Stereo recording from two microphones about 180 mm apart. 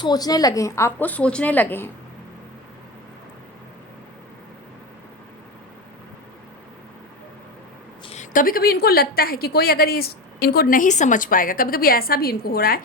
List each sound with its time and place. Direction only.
0.0 s a woman's voice: 20° left (ahead or behind)
8.0 s a woman's voice: 40° left (ahead or behind); by 12.8 s 55° left (ahead or behind)